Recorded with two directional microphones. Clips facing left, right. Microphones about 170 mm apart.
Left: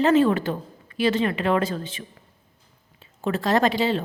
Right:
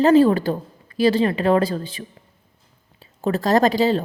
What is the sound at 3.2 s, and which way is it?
Speech, 40° right (ahead or behind).